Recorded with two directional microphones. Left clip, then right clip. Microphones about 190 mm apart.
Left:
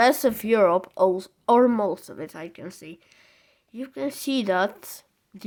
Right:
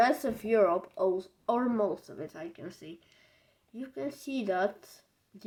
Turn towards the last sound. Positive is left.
turn(degrees=45)  # may be behind; listen again after turning